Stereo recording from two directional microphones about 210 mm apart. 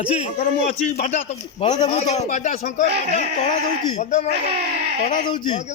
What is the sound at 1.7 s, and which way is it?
Speech, 20° left (ahead or behind).